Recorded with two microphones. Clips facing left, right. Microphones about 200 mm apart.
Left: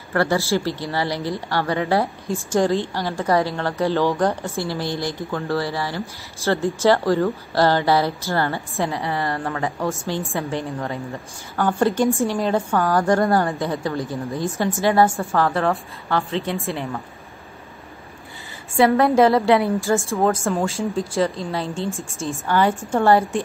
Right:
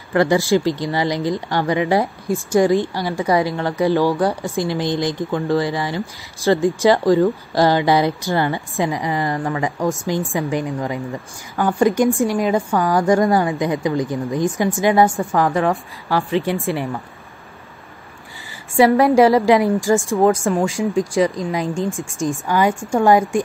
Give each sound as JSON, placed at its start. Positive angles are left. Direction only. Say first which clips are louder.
{"t": 0.1, "sound": "a woman's voice", "louder": "right 5 dB", "side_deg": -15}
{"t": 18.8, "sound": "a woman's voice", "louder": "right 3 dB", "side_deg": -10}